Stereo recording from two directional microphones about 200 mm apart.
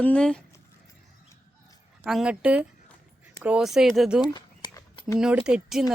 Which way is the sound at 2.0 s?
Centre (ahead or behind).